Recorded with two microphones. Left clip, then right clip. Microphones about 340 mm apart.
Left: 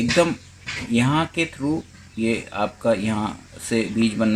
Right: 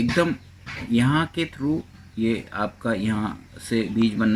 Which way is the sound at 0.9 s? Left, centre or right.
Centre.